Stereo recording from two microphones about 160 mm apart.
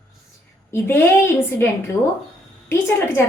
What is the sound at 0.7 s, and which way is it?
Speech, 15° left (ahead or behind).